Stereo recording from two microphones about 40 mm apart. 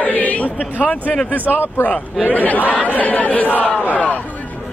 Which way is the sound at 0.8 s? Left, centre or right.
Left.